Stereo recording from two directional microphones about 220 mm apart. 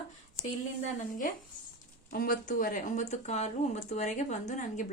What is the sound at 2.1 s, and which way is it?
Speech, 40° left (ahead or behind).